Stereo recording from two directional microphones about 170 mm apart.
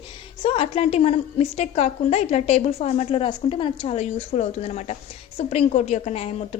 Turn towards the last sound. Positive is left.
turn(degrees=40)  # may be behind; listen again after turning